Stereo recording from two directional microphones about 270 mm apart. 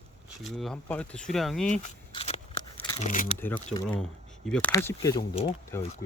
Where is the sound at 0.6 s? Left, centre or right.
Centre.